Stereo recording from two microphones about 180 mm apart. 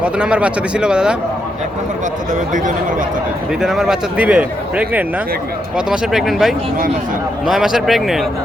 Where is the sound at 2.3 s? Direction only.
45° right (ahead or behind).